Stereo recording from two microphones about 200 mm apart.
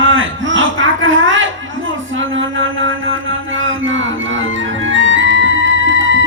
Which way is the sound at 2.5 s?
75° right (ahead or behind).